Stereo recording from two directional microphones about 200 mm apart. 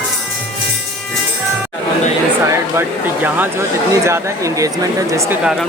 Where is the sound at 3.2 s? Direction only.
10° right (ahead or behind).